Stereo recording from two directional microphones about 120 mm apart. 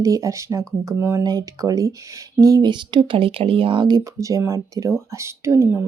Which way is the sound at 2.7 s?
40° right (ahead or behind).